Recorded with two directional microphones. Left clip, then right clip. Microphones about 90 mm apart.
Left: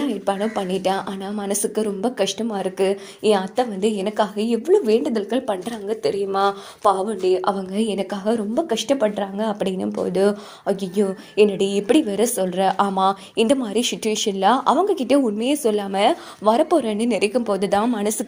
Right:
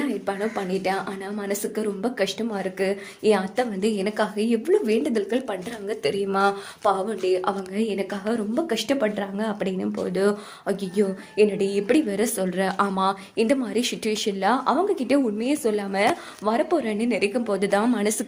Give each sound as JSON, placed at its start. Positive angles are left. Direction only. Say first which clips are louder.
{"t": 0.3, "sound": "a woman's voice", "louder": "left 4 dB", "side_deg": 60}
{"t": 3.3, "sound": "a woman's voice", "louder": "left 3 dB", "side_deg": 30}
{"t": 5.9, "sound": "a woman's voice", "louder": "left 3 dB", "side_deg": 10}
{"t": 6.8, "sound": "speech", "louder": "left 4 dB", "side_deg": 35}
{"t": 7.7, "sound": "a woman's voice", "louder": "left 3 dB", "side_deg": 60}
{"t": 8.1, "sound": "speech", "louder": "left 5 dB", "side_deg": 35}
{"t": 8.5, "sound": "a woman's voice", "louder": "left 2 dB", "side_deg": 20}
{"t": 9.6, "sound": "speech", "louder": "left 4 dB", "side_deg": 35}
{"t": 11.3, "sound": "a woman's voice", "louder": "left 3 dB", "side_deg": 50}
{"t": 16.4, "sound": "a woman's voice", "louder": "left 6 dB", "side_deg": 85}
{"t": 17.6, "sound": "speech", "louder": "left 1 dB", "side_deg": 30}
{"t": 17.8, "sound": "a woman's voice", "louder": "left 1 dB", "side_deg": 20}